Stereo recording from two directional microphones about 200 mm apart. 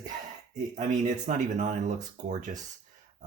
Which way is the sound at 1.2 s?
35° right (ahead or behind).